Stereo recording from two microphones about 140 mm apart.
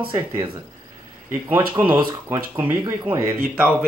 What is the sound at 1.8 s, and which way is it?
Speech, 35° right (ahead or behind).